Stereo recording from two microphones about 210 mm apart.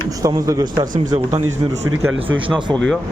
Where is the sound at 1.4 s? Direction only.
75° right (ahead or behind).